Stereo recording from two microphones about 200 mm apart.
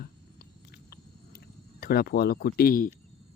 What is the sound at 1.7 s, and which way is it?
Speech, 50° left (ahead or behind).